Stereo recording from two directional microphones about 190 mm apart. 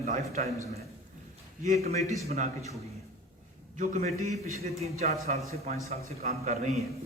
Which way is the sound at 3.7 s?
40° right (ahead or behind).